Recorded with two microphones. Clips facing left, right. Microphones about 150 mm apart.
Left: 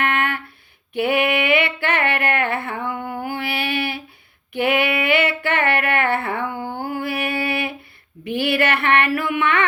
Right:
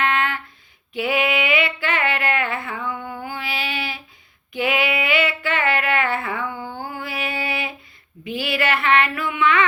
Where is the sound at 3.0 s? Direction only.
45° left (ahead or behind).